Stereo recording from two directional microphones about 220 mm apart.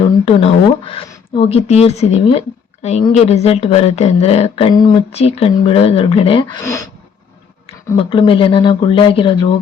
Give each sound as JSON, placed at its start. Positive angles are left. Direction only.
{"t": 0.3, "sound": "speech", "side_deg": 25}
{"t": 7.9, "sound": "speech", "side_deg": 20}